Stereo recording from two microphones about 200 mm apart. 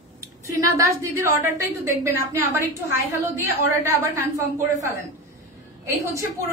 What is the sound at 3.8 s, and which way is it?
Speech, 15° right (ahead or behind).